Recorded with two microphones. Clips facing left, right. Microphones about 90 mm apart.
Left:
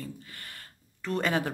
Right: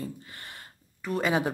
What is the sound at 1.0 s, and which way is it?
Speech, 10° right (ahead or behind).